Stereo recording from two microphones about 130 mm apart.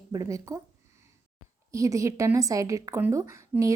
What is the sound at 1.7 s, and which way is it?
A woman's voice, 25° right (ahead or behind).